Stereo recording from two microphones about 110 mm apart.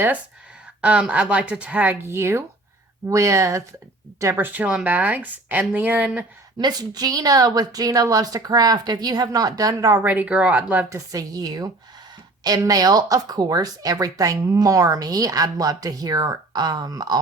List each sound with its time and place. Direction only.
0.8 s speech: 10° right (ahead or behind)
6.6 s speech: 40° right (ahead or behind)
10.0 s speech: 15° right (ahead or behind)
10.8 s speech: 30° right (ahead or behind)